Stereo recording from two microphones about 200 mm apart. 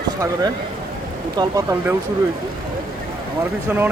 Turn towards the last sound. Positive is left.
turn(degrees=-10)  # may be behind; listen again after turning